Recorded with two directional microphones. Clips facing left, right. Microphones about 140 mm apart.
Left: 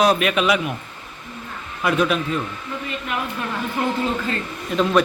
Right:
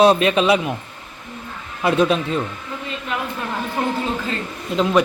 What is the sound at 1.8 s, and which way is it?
Speech, 30° right (ahead or behind).